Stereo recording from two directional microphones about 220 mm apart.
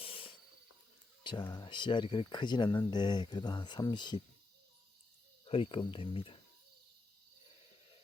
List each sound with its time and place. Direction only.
0.0 s a sound: 25° left (ahead or behind)
1.2 s speech: 20° left (ahead or behind)
5.5 s speech: 25° left (ahead or behind)